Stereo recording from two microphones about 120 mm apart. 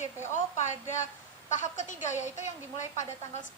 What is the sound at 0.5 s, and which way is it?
Speech, 85° left.